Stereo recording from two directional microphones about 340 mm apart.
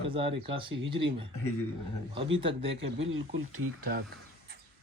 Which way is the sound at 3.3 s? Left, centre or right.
Right.